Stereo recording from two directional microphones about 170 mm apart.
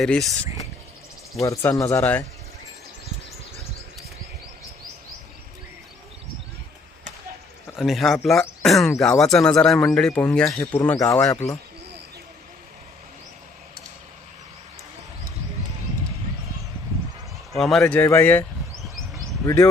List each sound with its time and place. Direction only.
0.0 s speech: centre (ahead or behind)
1.4 s speech: 20° left (ahead or behind)
7.8 s speech: centre (ahead or behind); by 11.5 s 20° left (ahead or behind)
17.5 s speech: centre (ahead or behind)
19.5 s speech: 15° left (ahead or behind)